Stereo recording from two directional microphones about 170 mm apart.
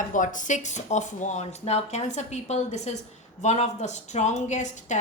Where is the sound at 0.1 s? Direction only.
50° left (ahead or behind).